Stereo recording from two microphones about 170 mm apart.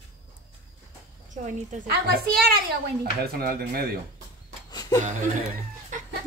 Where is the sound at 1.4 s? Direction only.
45° right (ahead or behind).